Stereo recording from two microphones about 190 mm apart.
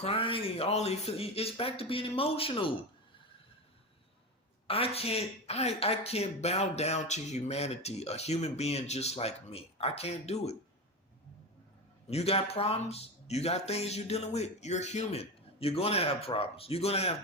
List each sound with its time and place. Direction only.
0.0 s speech: 30° left (ahead or behind)
4.7 s speech: 30° left (ahead or behind)
12.1 s speech: 30° left (ahead or behind)